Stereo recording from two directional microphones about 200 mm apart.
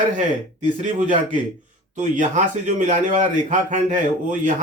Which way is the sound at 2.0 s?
40° right (ahead or behind).